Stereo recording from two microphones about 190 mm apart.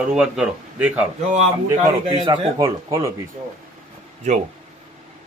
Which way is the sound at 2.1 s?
25° right (ahead or behind).